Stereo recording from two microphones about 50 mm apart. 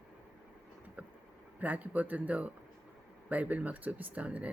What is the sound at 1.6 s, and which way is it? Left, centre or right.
Speech, right.